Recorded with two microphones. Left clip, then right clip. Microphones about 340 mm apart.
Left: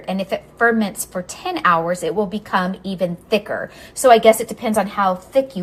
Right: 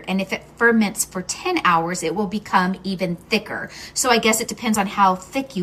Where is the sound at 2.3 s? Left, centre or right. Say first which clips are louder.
Right 1 dB; centre.